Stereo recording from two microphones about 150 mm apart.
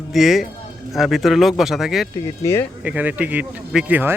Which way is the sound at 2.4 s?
15° left (ahead or behind).